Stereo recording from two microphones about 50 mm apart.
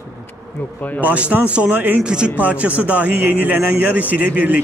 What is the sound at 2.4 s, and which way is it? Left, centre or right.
Speech, right.